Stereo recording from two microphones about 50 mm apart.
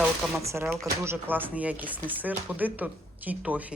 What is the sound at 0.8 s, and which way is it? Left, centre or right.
Speech, right.